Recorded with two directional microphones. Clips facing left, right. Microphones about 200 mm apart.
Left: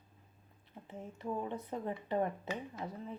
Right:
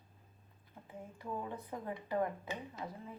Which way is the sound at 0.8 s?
25° left (ahead or behind).